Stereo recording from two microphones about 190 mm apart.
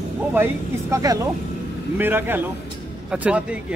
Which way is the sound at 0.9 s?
20° right (ahead or behind).